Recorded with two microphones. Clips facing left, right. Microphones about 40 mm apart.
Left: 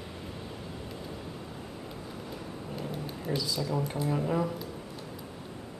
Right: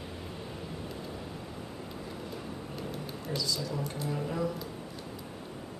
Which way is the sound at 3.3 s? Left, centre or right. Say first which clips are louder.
Left 3 dB; centre.